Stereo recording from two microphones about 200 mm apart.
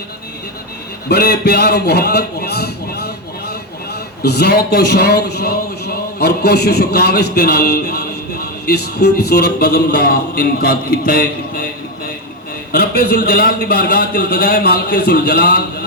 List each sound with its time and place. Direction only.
1.0 s a man's voice: 55° left (ahead or behind)
4.2 s a man's voice: 55° left (ahead or behind)